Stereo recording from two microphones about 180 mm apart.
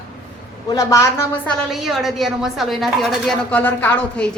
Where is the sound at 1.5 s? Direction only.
Centre (ahead or behind).